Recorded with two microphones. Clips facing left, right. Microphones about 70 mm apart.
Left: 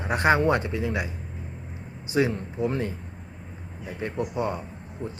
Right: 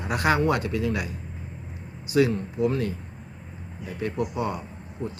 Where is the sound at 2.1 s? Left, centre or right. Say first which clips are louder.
Right 2 dB; left.